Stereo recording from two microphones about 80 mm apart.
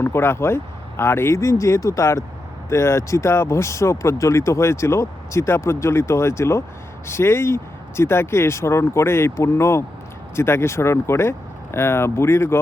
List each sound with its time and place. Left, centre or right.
0.0 s speech: left